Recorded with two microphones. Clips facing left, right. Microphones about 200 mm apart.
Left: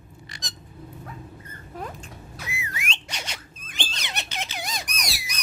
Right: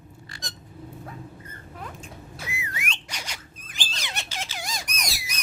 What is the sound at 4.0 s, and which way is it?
Squeak, 20° left (ahead or behind).